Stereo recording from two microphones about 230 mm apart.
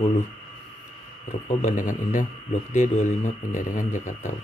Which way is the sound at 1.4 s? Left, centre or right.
Left.